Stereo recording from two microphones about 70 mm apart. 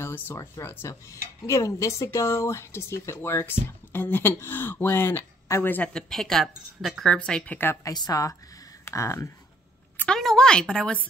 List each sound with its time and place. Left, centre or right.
0.0 s speech: left
0.4 s speech: left
5.9 s speech: centre
7.2 s speech: centre
7.5 s speech: left
7.8 s a woman's voice: left
8.8 s speech: left
10.0 s a sound: centre